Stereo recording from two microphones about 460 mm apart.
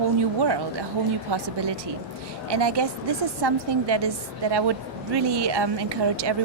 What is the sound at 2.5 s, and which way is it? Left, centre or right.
A woman's voice, right.